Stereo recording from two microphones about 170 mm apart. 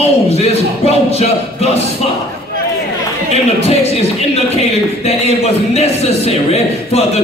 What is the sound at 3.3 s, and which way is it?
Speech, 35° left (ahead or behind).